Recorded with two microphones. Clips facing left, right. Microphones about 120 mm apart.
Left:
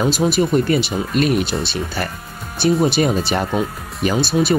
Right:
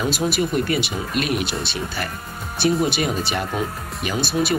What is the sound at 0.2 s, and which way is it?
Speech, 30° left (ahead or behind).